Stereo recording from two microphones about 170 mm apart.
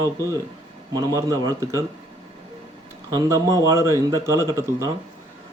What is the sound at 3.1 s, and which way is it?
A man's voice, 20° right (ahead or behind).